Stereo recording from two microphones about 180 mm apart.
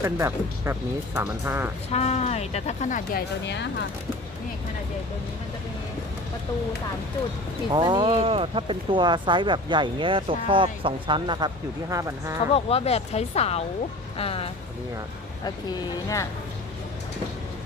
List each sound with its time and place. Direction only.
0.0 s speech: 15° right (ahead or behind)
1.9 s speech: 35° left (ahead or behind); by 3.8 s 75° left (ahead or behind)
7.7 s speech: 25° right (ahead or behind)
12.5 s speech: 35° left (ahead or behind)